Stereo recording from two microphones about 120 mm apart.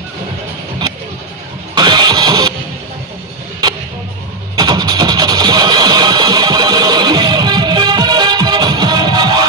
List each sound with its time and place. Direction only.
1.8 s engine starting: 35° right (ahead or behind)
4.6 s music: 35° right (ahead or behind)